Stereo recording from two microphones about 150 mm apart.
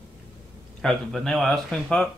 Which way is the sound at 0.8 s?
5° left (ahead or behind).